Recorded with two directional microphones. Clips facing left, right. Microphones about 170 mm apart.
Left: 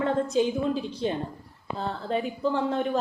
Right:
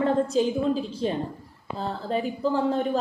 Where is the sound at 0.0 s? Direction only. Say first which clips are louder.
Right 2 dB; 35° right (ahead or behind).